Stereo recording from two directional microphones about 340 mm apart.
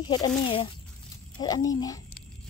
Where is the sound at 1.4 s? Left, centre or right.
Centre.